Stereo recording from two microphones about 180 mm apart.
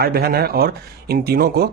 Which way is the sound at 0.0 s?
55° right (ahead or behind).